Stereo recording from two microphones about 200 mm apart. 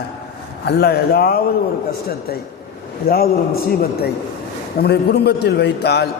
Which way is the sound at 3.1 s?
50° left (ahead or behind).